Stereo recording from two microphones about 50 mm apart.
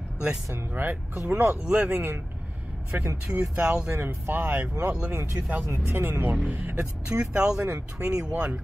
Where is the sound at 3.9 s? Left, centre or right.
Right.